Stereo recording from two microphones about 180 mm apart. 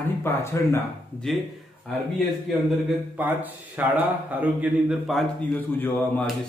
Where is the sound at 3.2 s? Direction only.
10° right (ahead or behind).